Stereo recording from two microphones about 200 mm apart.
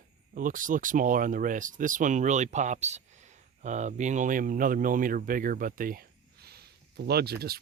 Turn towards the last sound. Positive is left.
turn(degrees=-50)  # may be behind; listen again after turning